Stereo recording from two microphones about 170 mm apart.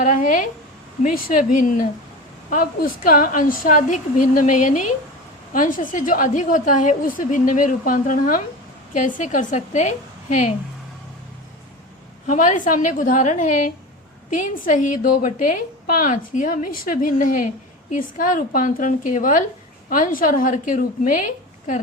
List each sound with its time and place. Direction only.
0.0 s a woman's voice: 50° left (ahead or behind)
12.2 s a woman's voice: 50° left (ahead or behind)